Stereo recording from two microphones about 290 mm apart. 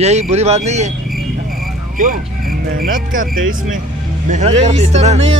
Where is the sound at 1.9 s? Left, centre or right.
Right.